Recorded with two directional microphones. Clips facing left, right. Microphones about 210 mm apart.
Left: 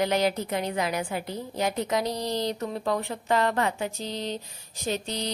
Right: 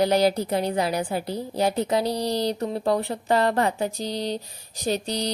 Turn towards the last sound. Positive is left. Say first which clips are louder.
# right 4 dB
turn(degrees=-35)  # may be behind; listen again after turning